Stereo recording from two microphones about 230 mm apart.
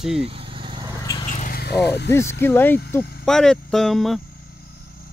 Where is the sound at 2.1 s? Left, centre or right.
Centre.